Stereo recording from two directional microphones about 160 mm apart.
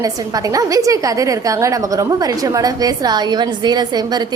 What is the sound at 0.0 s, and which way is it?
A woman's voice, 20° right (ahead or behind).